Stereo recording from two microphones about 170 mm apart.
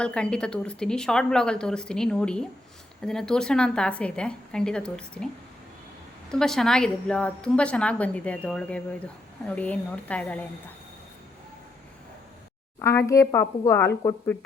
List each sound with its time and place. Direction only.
0.0 s a woman's voice: 5° left (ahead or behind)
6.3 s a woman's voice: 5° left (ahead or behind)
12.8 s a woman's voice: 15° left (ahead or behind)